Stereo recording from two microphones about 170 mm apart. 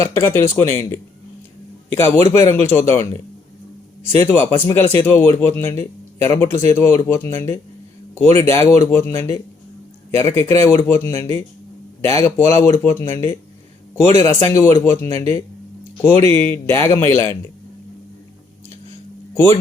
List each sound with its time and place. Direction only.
0.0 s speech: 15° left (ahead or behind)